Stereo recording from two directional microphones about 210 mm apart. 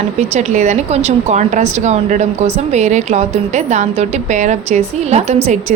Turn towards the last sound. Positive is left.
turn(degrees=-30)  # may be behind; listen again after turning